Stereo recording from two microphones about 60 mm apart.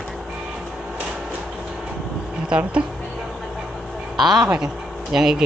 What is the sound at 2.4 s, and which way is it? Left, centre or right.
Speech, centre.